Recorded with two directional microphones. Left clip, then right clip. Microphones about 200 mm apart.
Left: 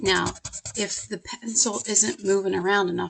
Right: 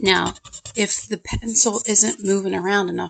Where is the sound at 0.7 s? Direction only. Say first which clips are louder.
Right 7 dB; 35° right (ahead or behind).